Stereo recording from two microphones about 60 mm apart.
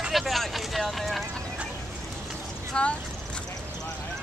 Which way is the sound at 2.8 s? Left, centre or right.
Centre.